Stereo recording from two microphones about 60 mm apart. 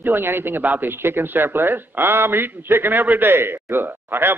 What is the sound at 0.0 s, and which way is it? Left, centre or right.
Speech, right.